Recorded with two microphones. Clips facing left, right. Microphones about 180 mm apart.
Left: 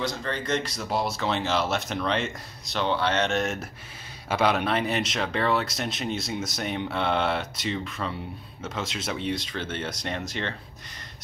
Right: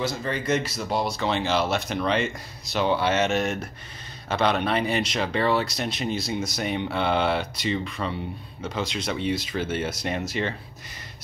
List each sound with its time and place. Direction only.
0.0 s speech: 10° right (ahead or behind)